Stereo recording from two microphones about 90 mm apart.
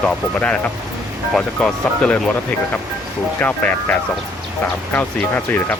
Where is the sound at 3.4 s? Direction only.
15° left (ahead or behind).